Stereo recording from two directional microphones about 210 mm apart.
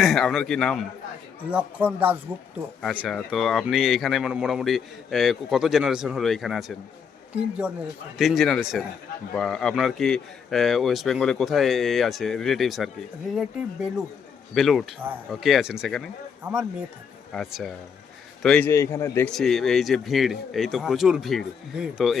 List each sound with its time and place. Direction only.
0.0 s speech: centre (ahead or behind)
8.2 s speech: centre (ahead or behind)
17.3 s speech: centre (ahead or behind)